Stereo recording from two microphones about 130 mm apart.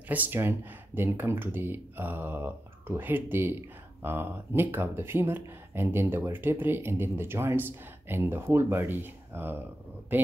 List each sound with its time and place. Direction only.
0.1 s speech: 15° right (ahead or behind)